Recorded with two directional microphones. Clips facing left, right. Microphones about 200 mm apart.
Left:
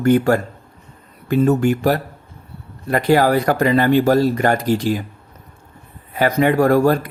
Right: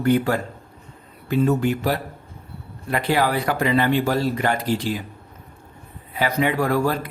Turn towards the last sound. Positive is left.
turn(degrees=45)  # may be behind; listen again after turning